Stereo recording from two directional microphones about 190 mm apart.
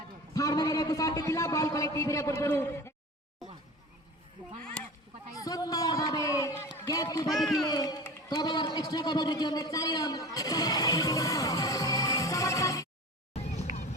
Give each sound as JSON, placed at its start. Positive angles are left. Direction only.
{"t": 0.3, "sound": "a man's voice", "side_deg": 20}
{"t": 4.8, "sound": "honk", "side_deg": 5}
{"t": 5.4, "sound": "a sound", "side_deg": 20}
{"t": 7.3, "sound": "speech", "side_deg": 0}
{"t": 7.6, "sound": "a man's voice", "side_deg": 20}
{"t": 13.3, "sound": "a sound", "side_deg": 35}